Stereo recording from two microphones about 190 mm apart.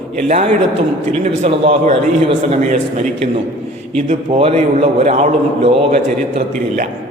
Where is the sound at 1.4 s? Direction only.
30° right (ahead or behind).